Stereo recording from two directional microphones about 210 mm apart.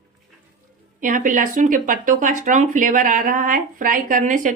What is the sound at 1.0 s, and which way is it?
Speech, 40° right (ahead or behind).